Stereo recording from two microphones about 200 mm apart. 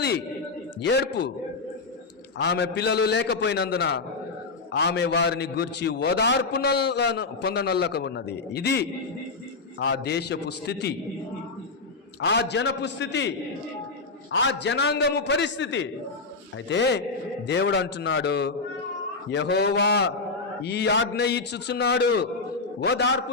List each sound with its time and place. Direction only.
0.8 s a man's voice: 60° left (ahead or behind)
2.4 s a man's voice: 60° left (ahead or behind)
12.2 s a man's voice: 60° left (ahead or behind)